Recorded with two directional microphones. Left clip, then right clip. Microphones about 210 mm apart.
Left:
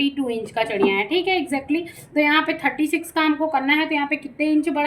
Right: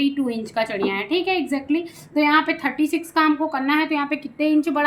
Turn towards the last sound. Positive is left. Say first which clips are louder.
# right 1 dB
turn(degrees=-35)  # may be behind; listen again after turning